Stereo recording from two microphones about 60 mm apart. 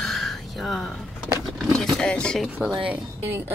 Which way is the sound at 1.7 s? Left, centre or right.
Centre.